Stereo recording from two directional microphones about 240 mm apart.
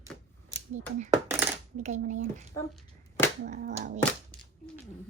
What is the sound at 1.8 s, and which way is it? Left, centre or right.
Speech, right.